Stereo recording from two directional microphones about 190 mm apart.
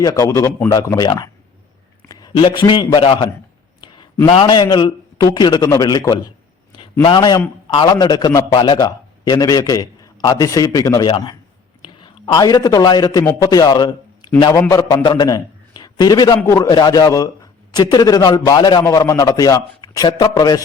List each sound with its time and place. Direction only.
0.0 s a man's voice: 20° left (ahead or behind)
4.3 s a man's voice: 25° left (ahead or behind)